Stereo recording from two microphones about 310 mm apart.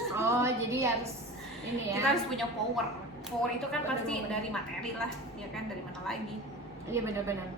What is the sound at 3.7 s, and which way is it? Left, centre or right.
Speech, centre.